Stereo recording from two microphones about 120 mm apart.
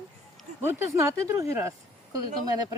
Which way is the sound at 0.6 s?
20° right (ahead or behind).